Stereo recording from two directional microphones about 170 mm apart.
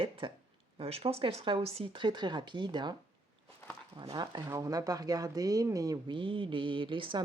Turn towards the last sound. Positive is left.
turn(degrees=-30)  # may be behind; listen again after turning